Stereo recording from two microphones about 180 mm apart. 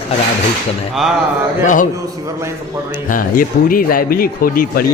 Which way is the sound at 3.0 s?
50° left (ahead or behind).